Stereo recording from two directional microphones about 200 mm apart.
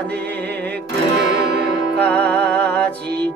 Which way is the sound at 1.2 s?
60° right (ahead or behind).